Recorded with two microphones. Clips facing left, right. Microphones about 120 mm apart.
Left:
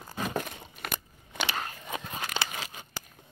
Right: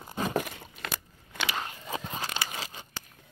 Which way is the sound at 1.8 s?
30° right (ahead or behind).